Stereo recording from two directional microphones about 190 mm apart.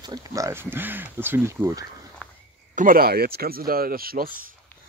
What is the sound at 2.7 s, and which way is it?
Speech, 50° right (ahead or behind).